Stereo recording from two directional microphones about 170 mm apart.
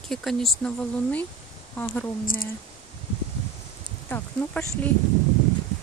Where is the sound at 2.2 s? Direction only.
55° left (ahead or behind).